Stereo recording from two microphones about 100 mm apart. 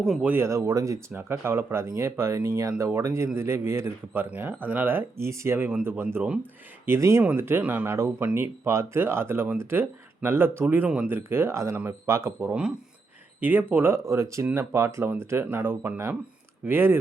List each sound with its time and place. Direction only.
0.0 s speech: 5° right (ahead or behind)
0.3 s speech: 25° right (ahead or behind)